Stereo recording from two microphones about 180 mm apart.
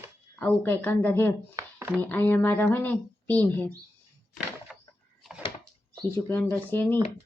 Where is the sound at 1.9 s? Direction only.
10° left (ahead or behind).